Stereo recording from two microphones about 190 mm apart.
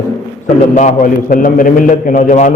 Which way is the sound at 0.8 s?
40° left (ahead or behind).